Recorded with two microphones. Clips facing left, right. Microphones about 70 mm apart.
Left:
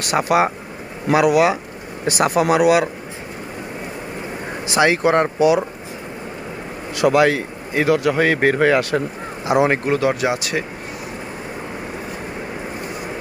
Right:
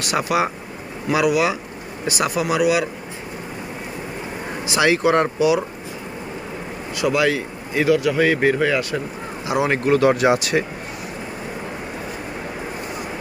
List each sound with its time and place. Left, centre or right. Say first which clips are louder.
0.1 s speech: left 4 dB; left
4.8 s speech: left 1 dB; left
6.9 s speech: left 4 dB; left
9.6 s speech: left 1 dB; left
9.9 s speech: right 3 dB; centre